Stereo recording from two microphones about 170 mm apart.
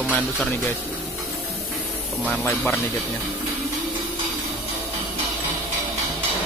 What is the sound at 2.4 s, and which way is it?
Speech, 15° left (ahead or behind).